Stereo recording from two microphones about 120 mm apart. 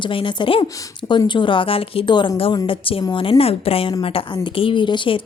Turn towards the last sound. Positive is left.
turn(degrees=45)  # may be behind; listen again after turning